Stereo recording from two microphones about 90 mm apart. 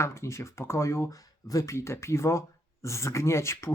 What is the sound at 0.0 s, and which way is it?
Speech, 30° left (ahead or behind).